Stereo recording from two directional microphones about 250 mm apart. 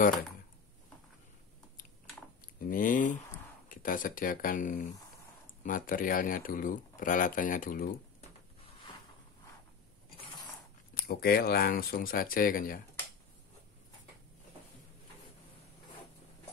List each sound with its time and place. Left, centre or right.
2.6 s speech: left
11.0 s speech: left